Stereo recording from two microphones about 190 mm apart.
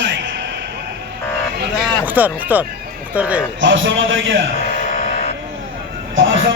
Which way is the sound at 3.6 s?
80° right.